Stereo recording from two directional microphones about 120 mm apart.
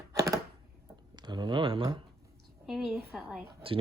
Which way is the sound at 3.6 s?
50° right (ahead or behind).